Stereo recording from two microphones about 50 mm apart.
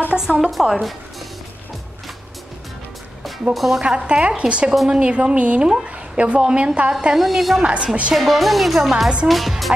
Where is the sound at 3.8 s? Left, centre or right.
Right.